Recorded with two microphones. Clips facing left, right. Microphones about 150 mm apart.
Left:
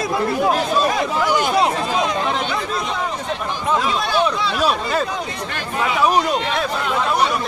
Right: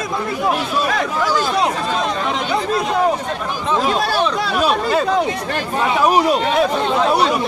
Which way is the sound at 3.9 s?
45° right (ahead or behind).